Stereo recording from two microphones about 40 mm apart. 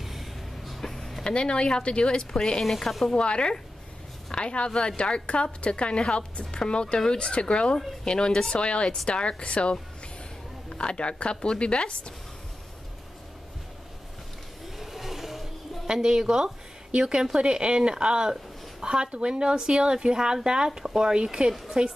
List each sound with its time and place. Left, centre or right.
0.0 s a sound: centre
0.7 s a sound: centre
1.2 s a woman's voice: left
2.6 s speech: centre
3.2 s a woman's voice: left
8.5 s a woman's voice: left
14.8 s vehicle: centre
15.9 s a woman's voice: centre